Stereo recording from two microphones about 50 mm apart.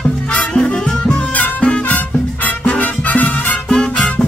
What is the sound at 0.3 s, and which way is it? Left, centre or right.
Music, left.